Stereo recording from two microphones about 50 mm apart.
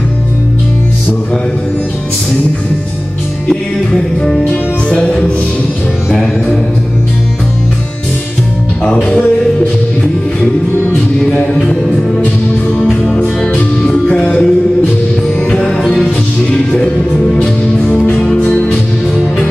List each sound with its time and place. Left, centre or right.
3.4 s music: centre
12.8 s music: centre
15.8 s music: centre
16.5 s music: centre